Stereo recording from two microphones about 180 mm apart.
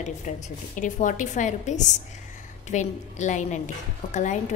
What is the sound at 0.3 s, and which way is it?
A woman's voice, 45° left (ahead or behind).